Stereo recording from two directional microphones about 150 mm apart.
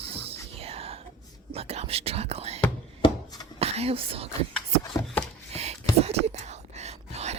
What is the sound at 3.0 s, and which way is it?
Chopping, 25° left (ahead or behind).